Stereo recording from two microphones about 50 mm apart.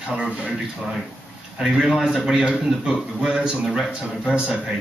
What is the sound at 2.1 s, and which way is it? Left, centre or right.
Speech, centre.